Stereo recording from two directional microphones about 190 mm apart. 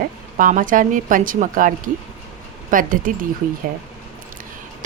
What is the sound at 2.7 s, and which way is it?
Speech, 45° right (ahead or behind).